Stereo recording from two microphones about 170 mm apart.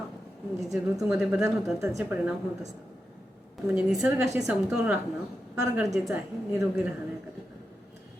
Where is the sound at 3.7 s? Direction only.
5° right (ahead or behind).